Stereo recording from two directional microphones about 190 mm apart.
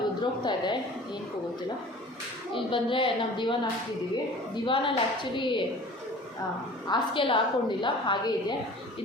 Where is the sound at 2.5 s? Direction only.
25° left (ahead or behind).